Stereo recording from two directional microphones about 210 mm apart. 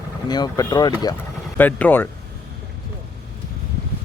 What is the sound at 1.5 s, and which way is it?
Speech, 10° left (ahead or behind).